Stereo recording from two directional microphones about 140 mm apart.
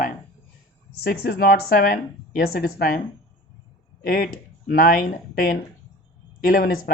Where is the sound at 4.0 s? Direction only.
80° left.